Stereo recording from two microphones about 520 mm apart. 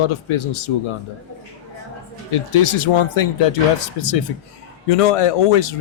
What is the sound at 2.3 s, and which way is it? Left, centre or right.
Speech, left.